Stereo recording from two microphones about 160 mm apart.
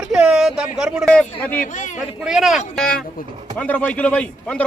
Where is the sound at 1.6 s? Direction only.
50° left (ahead or behind).